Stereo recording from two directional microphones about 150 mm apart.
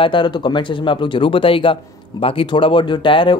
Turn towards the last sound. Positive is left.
turn(degrees=35)  # may be behind; listen again after turning